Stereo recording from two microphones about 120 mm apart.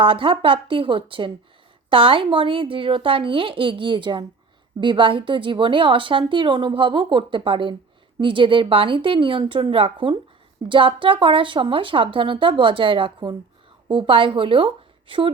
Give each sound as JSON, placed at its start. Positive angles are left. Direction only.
{"t": 0.0, "sound": "a woman's voice", "side_deg": -45}